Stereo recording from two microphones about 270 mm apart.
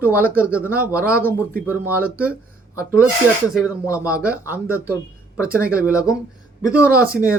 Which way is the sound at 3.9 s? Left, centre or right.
Centre.